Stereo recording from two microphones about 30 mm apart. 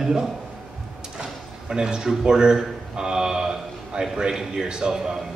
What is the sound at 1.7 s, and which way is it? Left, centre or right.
A man's voice, right.